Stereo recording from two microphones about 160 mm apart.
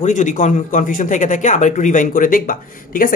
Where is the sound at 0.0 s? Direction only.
50° left (ahead or behind).